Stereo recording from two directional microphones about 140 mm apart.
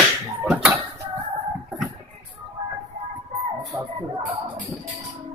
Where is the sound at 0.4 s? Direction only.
5° right (ahead or behind).